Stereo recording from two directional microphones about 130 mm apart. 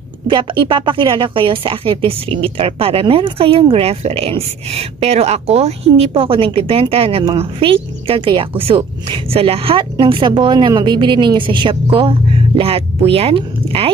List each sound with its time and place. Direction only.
0.3 s a woman's voice: 35° right (ahead or behind)